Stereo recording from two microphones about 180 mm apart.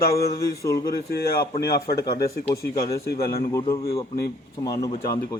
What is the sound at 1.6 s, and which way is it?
Speech, 60° left (ahead or behind).